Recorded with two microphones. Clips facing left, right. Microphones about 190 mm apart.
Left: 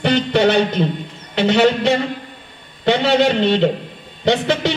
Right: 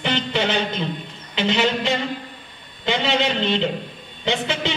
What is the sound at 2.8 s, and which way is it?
Music, 65° left (ahead or behind).